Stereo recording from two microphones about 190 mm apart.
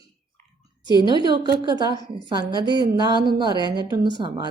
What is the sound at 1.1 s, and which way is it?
A woman's voice, 25° right (ahead or behind).